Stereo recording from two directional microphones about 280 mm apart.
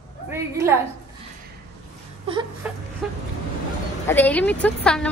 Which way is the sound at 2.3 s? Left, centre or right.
Centre.